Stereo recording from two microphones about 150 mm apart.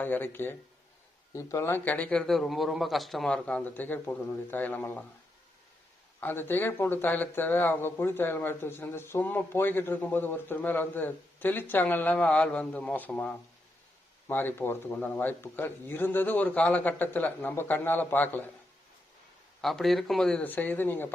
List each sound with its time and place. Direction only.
0.0 s speech: 15° left (ahead or behind)
6.1 s speech: 15° left (ahead or behind)
19.6 s speech: centre (ahead or behind)